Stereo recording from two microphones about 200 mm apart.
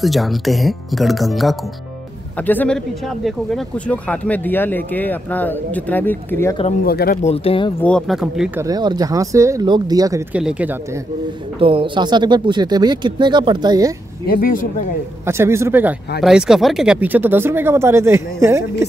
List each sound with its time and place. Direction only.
0.0 s speech: centre (ahead or behind)
6.8 s speech: 50° left (ahead or behind)
7.2 s speech: 30° left (ahead or behind)
7.8 s speech: centre (ahead or behind)
8.5 s speech: 20° right (ahead or behind)
10.3 s speech: 5° right (ahead or behind)
11.6 s speech: 25° right (ahead or behind)
14.2 s speech: 45° left (ahead or behind)
15.2 s speech: 15° right (ahead or behind)